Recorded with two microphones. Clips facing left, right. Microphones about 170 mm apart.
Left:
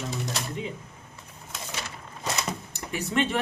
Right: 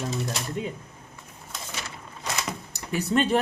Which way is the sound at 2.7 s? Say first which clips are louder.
Right 4 dB; 40° right (ahead or behind).